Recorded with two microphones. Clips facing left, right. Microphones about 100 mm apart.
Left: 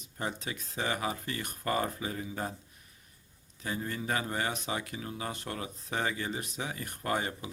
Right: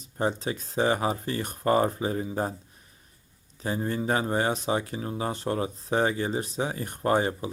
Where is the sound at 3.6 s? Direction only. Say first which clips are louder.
Right 7 dB; 30° right (ahead or behind).